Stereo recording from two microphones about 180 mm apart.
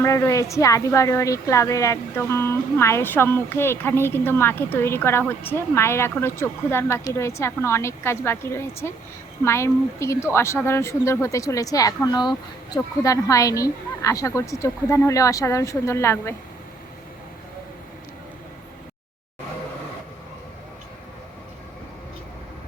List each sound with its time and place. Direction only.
0.0 s a woman's voice: 15° left (ahead or behind)